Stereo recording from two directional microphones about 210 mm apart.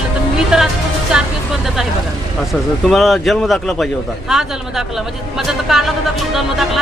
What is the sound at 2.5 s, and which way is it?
Speech, centre (ahead or behind).